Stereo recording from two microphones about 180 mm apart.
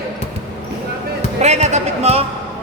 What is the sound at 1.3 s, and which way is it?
Speech, 40° right (ahead or behind).